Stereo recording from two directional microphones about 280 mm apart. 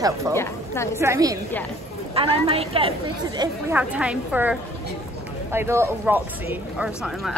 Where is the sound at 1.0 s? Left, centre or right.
Centre.